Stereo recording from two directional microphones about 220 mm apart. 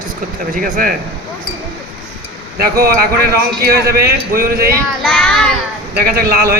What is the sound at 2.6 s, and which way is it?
Speech, 45° right (ahead or behind).